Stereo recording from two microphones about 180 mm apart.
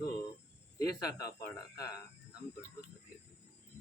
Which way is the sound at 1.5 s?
20° left (ahead or behind).